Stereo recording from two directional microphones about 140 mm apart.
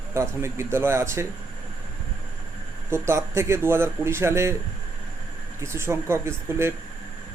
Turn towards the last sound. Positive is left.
turn(degrees=-20)  # may be behind; listen again after turning